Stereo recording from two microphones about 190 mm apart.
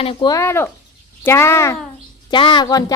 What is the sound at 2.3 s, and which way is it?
Speech, 25° left (ahead or behind).